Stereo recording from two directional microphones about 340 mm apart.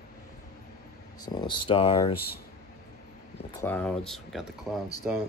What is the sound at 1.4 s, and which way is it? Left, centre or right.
Speech, centre.